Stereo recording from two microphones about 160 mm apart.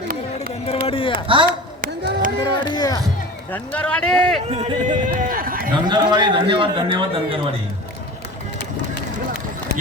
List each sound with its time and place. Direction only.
0.9 s a sound: 35° left (ahead or behind)
1.5 s a sound: 65° right (ahead or behind)
2.4 s music: 25° left (ahead or behind)
3.5 s speech: 10° left (ahead or behind)
4.5 s speech: 35° right (ahead or behind)
5.0 s run: 60° right (ahead or behind)
5.9 s a man's voice: 30° right (ahead or behind)